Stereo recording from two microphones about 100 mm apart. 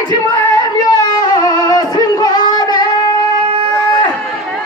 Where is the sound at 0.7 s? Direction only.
45° left (ahead or behind).